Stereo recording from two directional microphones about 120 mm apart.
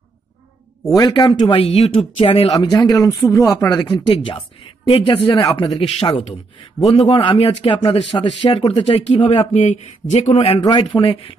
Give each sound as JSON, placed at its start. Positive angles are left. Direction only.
{"t": 0.9, "sound": "speech", "side_deg": 35}
{"t": 2.5, "sound": "speech", "side_deg": 35}
{"t": 4.1, "sound": "speech", "side_deg": 45}
{"t": 5.8, "sound": "speech", "side_deg": 50}
{"t": 9.5, "sound": "speech", "side_deg": 70}
{"t": 10.6, "sound": "speech", "side_deg": 40}